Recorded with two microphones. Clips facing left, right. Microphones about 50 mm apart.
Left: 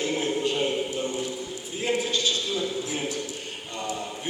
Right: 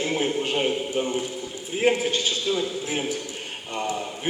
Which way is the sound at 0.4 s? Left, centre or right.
Right.